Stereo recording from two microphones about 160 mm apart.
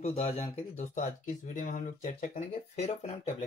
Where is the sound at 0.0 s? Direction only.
40° left (ahead or behind); by 2.4 s 60° left (ahead or behind).